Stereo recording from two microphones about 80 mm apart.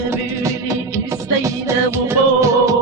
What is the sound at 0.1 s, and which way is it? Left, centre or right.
Music, right.